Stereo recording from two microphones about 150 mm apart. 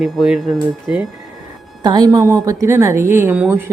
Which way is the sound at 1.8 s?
25° right (ahead or behind).